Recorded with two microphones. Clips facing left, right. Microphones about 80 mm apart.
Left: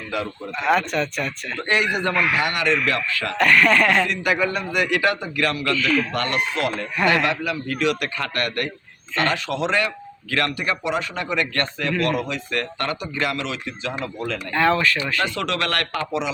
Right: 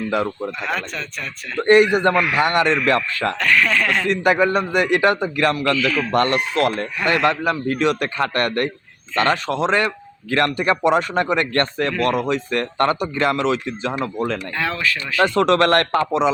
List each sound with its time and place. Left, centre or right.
0.6 s speech: centre
1.6 s a man's voice: right
3.3 s speech: centre
4.1 s a man's voice: right
5.7 s speech: centre
6.1 s a man's voice: right
14.5 s speech: centre
15.4 s a man's voice: right